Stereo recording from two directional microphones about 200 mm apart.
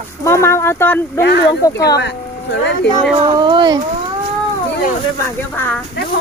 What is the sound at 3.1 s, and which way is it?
Speech, 20° right (ahead or behind).